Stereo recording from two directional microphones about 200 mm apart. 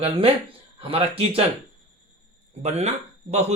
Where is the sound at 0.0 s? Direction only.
30° right (ahead or behind).